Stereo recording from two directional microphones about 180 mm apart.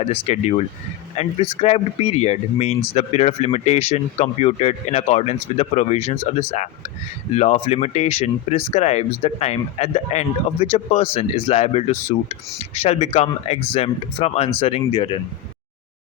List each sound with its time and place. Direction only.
0.0 s speech: 35° left (ahead or behind)